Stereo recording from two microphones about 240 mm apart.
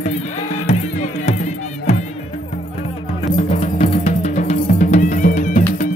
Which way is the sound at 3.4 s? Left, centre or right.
Left.